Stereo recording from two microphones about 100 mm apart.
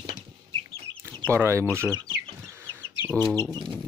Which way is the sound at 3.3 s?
25° left (ahead or behind).